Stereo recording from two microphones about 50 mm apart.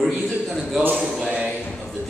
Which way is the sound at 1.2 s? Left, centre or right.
Centre.